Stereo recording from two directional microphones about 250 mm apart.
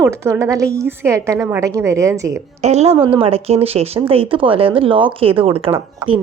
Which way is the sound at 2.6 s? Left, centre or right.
Right.